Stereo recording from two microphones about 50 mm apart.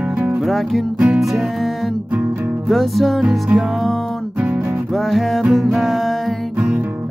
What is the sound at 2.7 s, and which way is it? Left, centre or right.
Music, centre.